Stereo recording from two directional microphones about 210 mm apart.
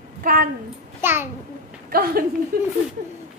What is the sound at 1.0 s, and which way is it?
Speech, 10° right (ahead or behind).